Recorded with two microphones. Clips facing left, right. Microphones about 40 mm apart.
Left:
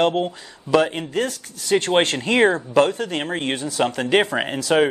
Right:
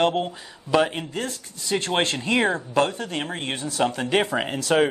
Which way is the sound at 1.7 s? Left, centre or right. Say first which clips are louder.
Left 5 dB; left.